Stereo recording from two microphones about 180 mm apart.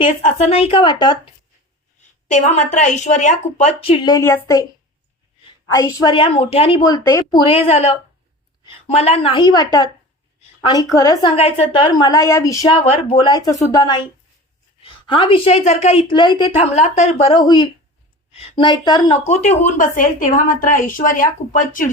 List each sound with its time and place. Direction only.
0.0 s a woman's voice: 35° left (ahead or behind)
2.2 s a woman's voice: 40° left (ahead or behind); by 4.6 s 15° left (ahead or behind)
5.7 s a woman's voice: 20° left (ahead or behind)
7.4 s a woman's voice: 35° left (ahead or behind); by 12.7 s 20° left (ahead or behind)
12.7 s a woman's voice: 35° left (ahead or behind)
19.3 s a woman's voice: 40° left (ahead or behind)